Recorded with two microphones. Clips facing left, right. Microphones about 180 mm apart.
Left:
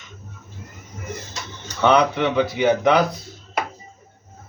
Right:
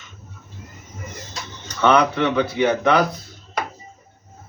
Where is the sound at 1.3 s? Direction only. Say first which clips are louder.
Even; 10° left (ahead or behind).